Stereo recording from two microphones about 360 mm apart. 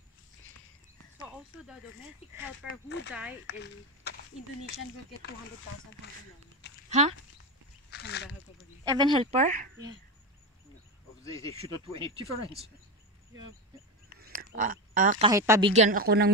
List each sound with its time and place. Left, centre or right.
3.1 s speech: centre
4.6 s speech: left
6.9 s speech: centre
7.9 s a sound: left
8.9 s speech: centre
11.6 s speech: centre
13.3 s speech: right; by 15.7 s centre
15.7 s speech: right